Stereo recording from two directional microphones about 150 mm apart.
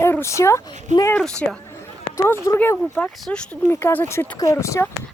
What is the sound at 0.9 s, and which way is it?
Speech, 50° right (ahead or behind).